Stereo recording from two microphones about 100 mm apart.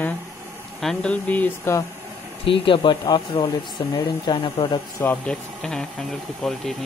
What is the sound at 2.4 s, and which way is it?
Speech, 60° left (ahead or behind).